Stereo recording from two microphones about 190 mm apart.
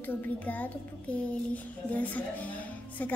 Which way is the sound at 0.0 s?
10° left (ahead or behind).